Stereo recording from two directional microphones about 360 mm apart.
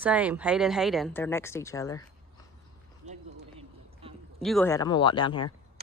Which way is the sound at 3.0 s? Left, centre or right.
Centre.